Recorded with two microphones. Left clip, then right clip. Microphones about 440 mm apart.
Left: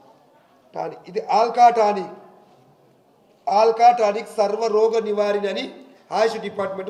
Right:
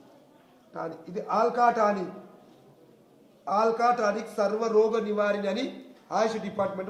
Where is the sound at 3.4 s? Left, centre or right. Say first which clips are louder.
Left 9 dB; centre.